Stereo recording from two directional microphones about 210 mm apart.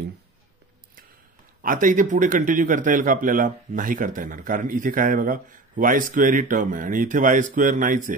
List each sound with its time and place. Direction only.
1.6 s speech: 40° right (ahead or behind)